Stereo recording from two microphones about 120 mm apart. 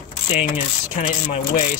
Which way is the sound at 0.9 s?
90° left.